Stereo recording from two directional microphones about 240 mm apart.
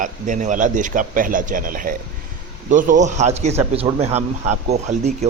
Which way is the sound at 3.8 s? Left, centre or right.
Centre.